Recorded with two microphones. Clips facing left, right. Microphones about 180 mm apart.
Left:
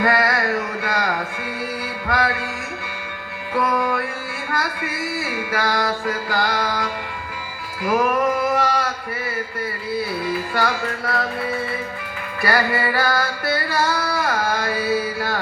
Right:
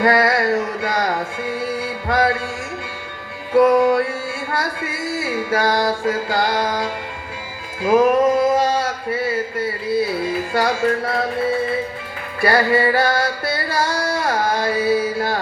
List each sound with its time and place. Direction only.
0.0 s music: 25° right (ahead or behind)
3.5 s music: 25° right (ahead or behind)
10.2 s music: 25° right (ahead or behind)
12.4 s music: 25° right (ahead or behind)